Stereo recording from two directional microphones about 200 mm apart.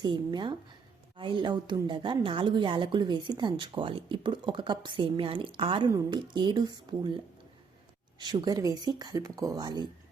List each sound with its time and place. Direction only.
0.0 s a woman's voice: 20° right (ahead or behind)
8.2 s a woman's voice: 20° right (ahead or behind)